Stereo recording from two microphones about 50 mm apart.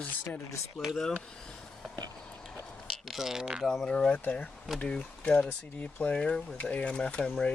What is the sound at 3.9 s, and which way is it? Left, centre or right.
Speech, left.